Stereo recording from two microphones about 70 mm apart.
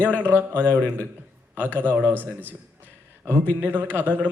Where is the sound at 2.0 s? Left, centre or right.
Left.